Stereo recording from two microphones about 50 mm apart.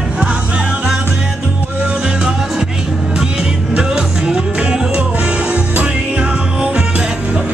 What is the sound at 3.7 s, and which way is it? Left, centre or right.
Music, centre.